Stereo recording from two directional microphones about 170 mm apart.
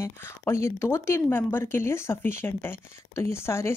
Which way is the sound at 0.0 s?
15° left (ahead or behind).